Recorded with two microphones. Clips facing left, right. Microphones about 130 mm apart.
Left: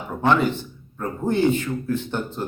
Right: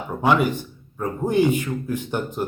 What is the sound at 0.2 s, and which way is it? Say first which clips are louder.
Speech: even; 10° right (ahead or behind).